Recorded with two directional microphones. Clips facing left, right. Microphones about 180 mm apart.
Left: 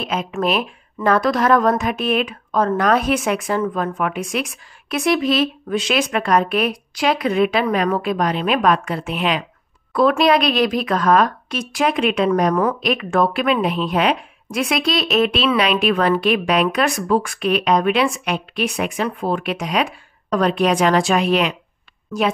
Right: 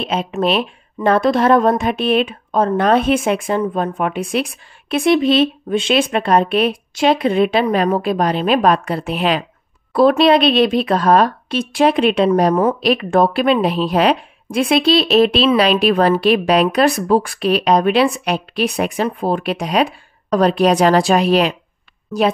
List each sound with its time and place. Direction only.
0.0 s a woman's voice: 25° right (ahead or behind)